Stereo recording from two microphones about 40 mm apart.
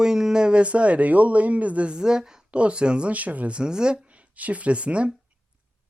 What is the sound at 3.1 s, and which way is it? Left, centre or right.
Speech, right.